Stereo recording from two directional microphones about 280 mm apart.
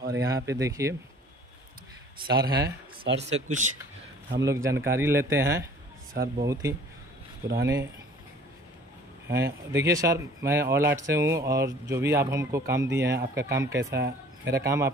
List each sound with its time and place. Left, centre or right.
0.2 s speech: centre
2.2 s speech: centre
3.2 s speech: right
4.4 s speech: centre
6.1 s speech: right
6.4 s speech: centre
9.3 s speech: centre
13.9 s speech: right
14.5 s speech: centre